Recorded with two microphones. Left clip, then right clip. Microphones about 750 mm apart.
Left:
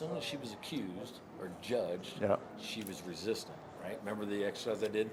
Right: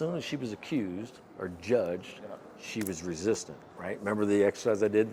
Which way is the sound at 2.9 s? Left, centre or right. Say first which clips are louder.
Right 9 dB; right.